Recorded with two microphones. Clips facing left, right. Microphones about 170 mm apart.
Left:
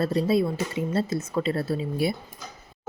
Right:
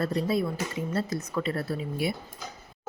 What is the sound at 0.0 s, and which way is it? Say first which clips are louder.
A woman's voice: left 4 dB; 25° left (ahead or behind).